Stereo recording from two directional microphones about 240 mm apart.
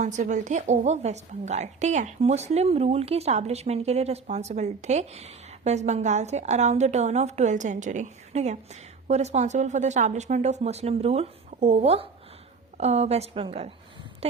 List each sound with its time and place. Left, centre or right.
0.0 s a woman's voice: right